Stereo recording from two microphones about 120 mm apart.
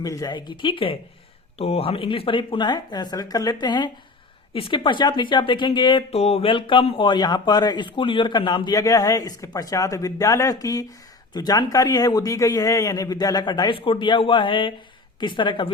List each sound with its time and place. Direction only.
0.0 s a man's voice: 30° left (ahead or behind)
4.5 s a man's voice: 50° left (ahead or behind)
6.1 s speech: 60° left (ahead or behind); by 7.9 s 35° left (ahead or behind)
7.9 s a man's voice: 45° left (ahead or behind)